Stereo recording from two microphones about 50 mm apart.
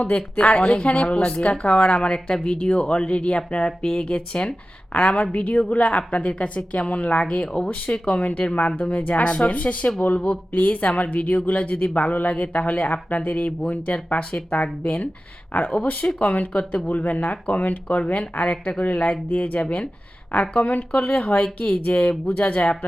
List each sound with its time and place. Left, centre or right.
0.3 s speech: centre
16.2 s speech: left
16.9 s speech: left
20.7 s speech: left